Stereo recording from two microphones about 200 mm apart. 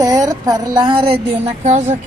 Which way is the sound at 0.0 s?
15° right (ahead or behind).